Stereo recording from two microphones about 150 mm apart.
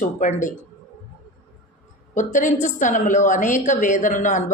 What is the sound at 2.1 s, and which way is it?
A woman's voice, 55° left (ahead or behind).